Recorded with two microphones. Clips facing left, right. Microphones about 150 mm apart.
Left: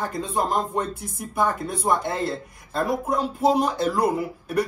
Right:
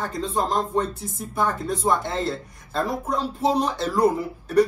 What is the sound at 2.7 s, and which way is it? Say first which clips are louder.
Speech: left 1 dB; centre (ahead or behind).